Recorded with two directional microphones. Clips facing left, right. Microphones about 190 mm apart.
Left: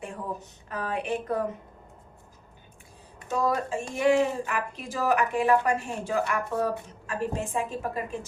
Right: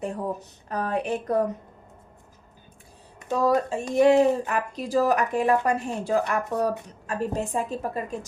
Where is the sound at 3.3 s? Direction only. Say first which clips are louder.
Right 4 dB; 35° right (ahead or behind).